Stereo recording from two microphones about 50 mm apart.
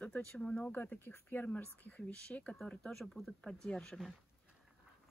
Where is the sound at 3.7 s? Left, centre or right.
Centre.